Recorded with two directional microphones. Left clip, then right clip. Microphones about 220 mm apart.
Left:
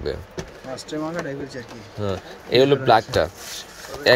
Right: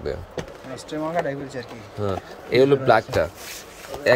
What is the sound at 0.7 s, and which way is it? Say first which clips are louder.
Speech: right 2 dB; 20° right (ahead or behind).